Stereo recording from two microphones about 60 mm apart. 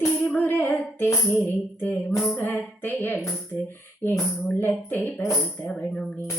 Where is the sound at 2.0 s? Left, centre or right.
Centre.